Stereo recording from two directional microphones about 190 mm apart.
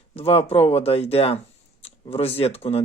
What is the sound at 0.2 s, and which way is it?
Speech, 30° left (ahead or behind).